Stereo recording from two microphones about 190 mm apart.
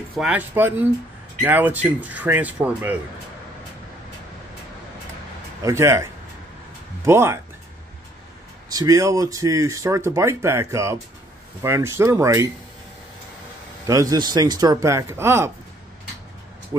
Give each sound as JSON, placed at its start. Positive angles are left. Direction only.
{"t": 0.1, "sound": "speech", "side_deg": -5}
{"t": 5.6, "sound": "speech", "side_deg": -15}
{"t": 7.1, "sound": "speech", "side_deg": -15}
{"t": 8.6, "sound": "speech", "side_deg": -20}
{"t": 13.8, "sound": "speech", "side_deg": -20}